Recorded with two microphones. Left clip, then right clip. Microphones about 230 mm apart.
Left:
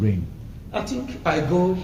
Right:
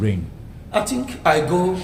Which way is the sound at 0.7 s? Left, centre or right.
Right.